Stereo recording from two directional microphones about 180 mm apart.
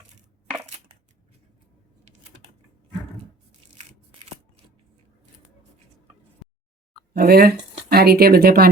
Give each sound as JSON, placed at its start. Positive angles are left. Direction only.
{"t": 7.1, "sound": "speech", "side_deg": -55}